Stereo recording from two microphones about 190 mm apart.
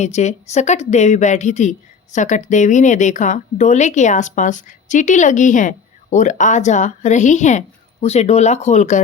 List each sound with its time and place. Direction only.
0.0 s speech: 35° left (ahead or behind)